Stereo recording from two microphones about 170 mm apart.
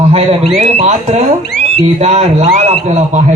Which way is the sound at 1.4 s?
80° left.